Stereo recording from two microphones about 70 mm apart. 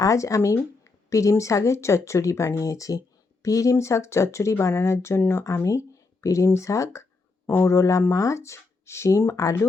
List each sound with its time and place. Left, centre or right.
0.0 s speech: left